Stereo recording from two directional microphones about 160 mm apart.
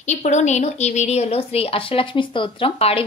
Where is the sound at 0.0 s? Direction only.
45° left (ahead or behind).